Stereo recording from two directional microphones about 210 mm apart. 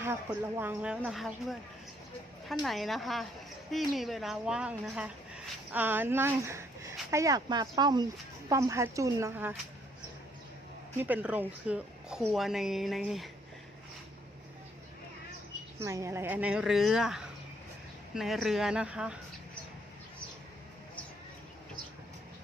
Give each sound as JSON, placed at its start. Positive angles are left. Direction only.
{"t": 0.0, "sound": "speech", "side_deg": -10}
{"t": 11.0, "sound": "speech", "side_deg": -5}
{"t": 15.8, "sound": "speech", "side_deg": -15}